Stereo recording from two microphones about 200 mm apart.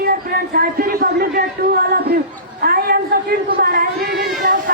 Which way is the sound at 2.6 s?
50° right (ahead or behind).